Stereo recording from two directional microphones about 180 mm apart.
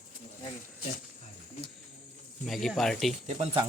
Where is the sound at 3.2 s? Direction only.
30° right (ahead or behind).